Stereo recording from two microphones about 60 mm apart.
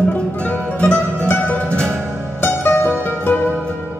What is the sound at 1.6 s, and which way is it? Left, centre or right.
Music, centre.